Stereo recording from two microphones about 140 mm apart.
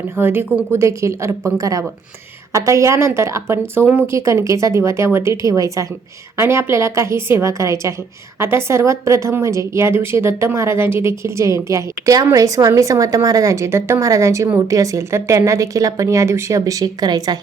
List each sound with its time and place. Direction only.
0.2 s a woman's voice: 15° right (ahead or behind)